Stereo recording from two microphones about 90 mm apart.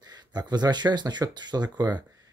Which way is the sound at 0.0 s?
50° right (ahead or behind).